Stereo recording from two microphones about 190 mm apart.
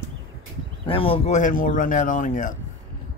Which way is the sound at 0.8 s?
30° left (ahead or behind).